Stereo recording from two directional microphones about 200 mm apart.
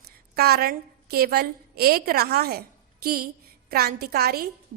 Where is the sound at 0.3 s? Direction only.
50° right (ahead or behind).